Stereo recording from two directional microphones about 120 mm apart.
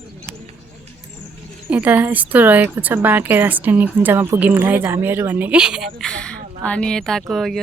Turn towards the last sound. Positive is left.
turn(degrees=0)  # may be behind; listen again after turning